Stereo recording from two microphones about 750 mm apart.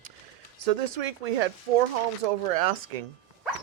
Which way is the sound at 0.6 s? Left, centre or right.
Right.